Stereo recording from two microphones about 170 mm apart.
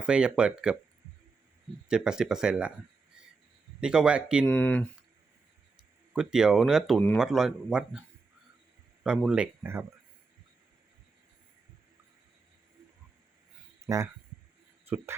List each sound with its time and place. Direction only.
0.0 s speech: 5° right (ahead or behind)
1.9 s speech: 5° right (ahead or behind)
3.8 s speech: 5° right (ahead or behind)
4.4 s speech: 10° left (ahead or behind)
6.1 s speech: 5° right (ahead or behind)
9.0 s speech: 5° right (ahead or behind)
13.8 s speech: 20° right (ahead or behind)